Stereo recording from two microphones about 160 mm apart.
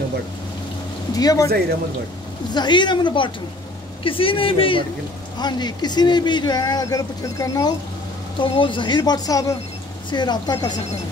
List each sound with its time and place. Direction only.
1.1 s speech: 20° left (ahead or behind)
2.5 s a man's voice: 30° left (ahead or behind)